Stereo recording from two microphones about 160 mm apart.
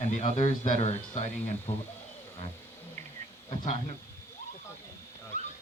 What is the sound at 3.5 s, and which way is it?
Speech, 40° left (ahead or behind).